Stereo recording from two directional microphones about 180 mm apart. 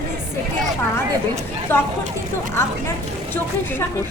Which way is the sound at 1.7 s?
10° left (ahead or behind).